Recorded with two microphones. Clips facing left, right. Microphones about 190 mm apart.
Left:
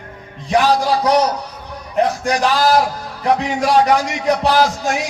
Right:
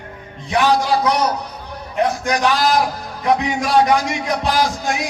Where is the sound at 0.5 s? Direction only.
35° left (ahead or behind).